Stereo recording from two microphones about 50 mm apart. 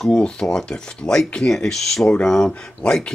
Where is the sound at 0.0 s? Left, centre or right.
Centre.